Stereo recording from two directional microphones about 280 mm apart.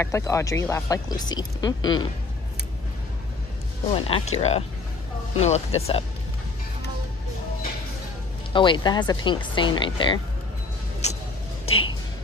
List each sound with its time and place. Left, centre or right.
0.0 s speech: centre
4.4 s speech: left
8.5 s speech: centre
11.6 s speech: left